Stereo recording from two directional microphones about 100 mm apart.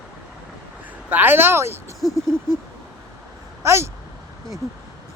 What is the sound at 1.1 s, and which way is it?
Speech, 20° right (ahead or behind).